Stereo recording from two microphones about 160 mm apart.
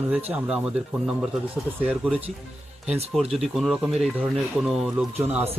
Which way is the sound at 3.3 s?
Centre (ahead or behind).